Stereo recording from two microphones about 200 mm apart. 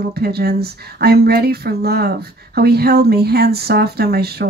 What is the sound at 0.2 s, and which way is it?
Speech, 50° right (ahead or behind).